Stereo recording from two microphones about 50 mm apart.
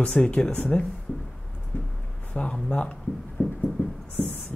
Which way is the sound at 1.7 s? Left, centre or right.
Left.